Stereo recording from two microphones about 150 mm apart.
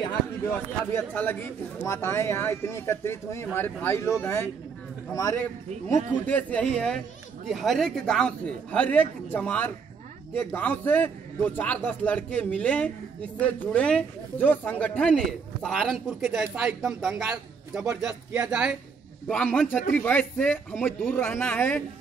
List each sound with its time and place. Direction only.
0.5 s a man's voice: 10° left (ahead or behind); by 18.8 s 5° right (ahead or behind)
19.2 s a man's voice: 5° left (ahead or behind)